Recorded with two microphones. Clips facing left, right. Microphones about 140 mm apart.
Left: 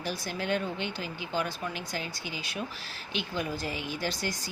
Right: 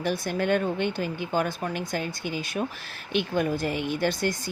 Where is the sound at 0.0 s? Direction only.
55° right (ahead or behind).